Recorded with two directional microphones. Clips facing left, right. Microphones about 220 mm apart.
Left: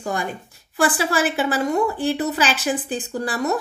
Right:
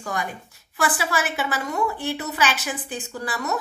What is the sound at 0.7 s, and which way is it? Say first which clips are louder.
A woman's voice: left 5 dB; 30° left (ahead or behind).